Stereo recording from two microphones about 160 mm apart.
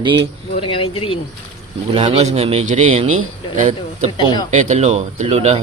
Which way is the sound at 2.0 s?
40° right (ahead or behind).